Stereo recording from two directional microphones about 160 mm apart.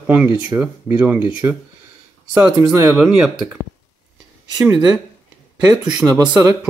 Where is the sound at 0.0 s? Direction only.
10° right (ahead or behind).